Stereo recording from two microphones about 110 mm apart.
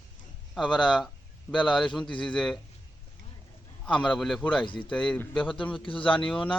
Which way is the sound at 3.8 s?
10° left (ahead or behind).